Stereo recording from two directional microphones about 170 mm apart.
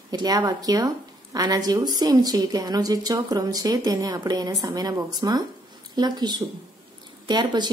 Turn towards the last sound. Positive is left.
turn(degrees=-25)  # may be behind; listen again after turning